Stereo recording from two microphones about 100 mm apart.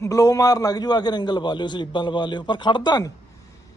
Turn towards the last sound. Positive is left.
turn(degrees=45)  # may be behind; listen again after turning